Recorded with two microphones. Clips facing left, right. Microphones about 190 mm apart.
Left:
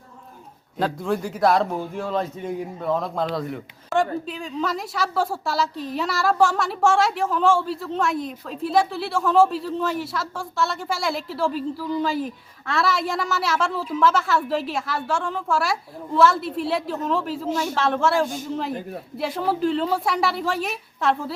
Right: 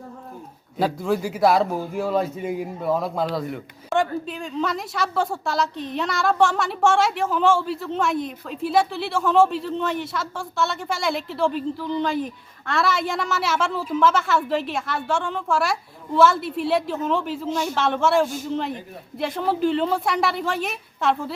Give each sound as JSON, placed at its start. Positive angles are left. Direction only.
{"t": 0.8, "sound": "a man's voice", "side_deg": -5}